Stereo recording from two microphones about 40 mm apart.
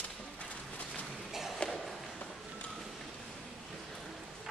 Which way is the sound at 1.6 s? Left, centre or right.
Left.